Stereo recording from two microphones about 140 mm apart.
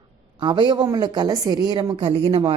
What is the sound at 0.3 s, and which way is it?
A woman's voice, 35° right (ahead or behind).